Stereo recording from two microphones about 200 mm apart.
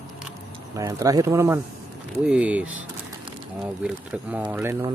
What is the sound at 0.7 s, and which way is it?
Speech, 15° right (ahead or behind).